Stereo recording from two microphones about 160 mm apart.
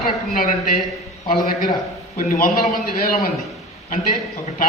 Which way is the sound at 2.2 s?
60° left (ahead or behind).